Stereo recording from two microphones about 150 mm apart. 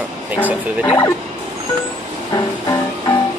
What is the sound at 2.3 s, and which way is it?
Music, 25° left (ahead or behind).